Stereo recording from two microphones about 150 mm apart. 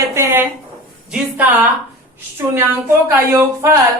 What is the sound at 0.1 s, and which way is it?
A woman's voice, 20° right (ahead or behind).